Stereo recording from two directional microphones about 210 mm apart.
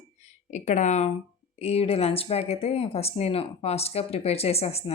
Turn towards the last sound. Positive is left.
turn(degrees=30)  # may be behind; listen again after turning